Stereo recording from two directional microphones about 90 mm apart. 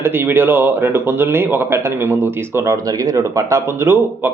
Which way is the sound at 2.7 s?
45° right (ahead or behind).